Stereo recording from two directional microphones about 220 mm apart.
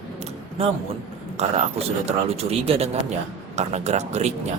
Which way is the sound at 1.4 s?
30° right (ahead or behind).